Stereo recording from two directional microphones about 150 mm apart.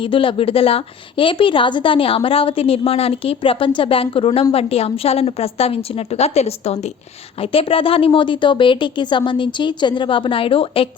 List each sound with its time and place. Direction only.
0.0 s a woman's voice: 35° left (ahead or behind)